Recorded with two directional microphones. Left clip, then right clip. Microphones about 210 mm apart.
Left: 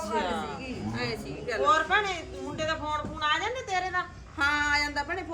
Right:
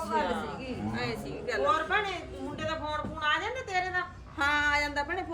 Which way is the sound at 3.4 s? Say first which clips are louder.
Left 2 dB; 15° left (ahead or behind).